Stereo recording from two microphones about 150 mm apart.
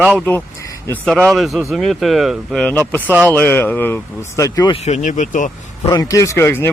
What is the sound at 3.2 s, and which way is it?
Speech, 10° left (ahead or behind).